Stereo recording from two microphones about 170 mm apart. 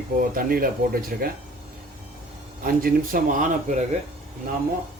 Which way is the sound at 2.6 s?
55° right (ahead or behind).